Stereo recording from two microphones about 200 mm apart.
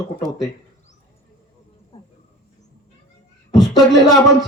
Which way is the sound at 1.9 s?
30° left (ahead or behind).